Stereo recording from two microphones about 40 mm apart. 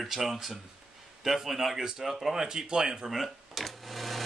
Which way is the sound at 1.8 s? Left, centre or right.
Centre.